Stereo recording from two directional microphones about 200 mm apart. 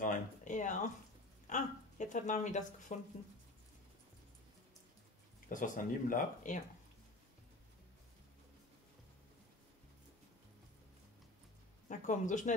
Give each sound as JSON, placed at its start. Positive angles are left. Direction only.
{"t": 0.0, "sound": "a sound", "side_deg": 40}
{"t": 5.5, "sound": "speech", "side_deg": 40}
{"t": 11.9, "sound": "speech", "side_deg": 40}